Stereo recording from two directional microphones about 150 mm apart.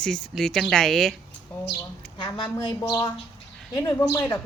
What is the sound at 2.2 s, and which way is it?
Speech, 30° left (ahead or behind).